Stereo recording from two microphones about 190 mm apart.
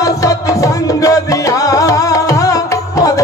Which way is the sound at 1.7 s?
15° left (ahead or behind).